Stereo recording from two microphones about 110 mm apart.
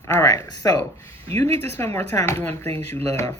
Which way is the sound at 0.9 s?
25° left (ahead or behind).